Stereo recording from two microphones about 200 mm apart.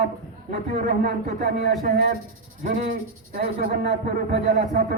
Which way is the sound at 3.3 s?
45° right (ahead or behind).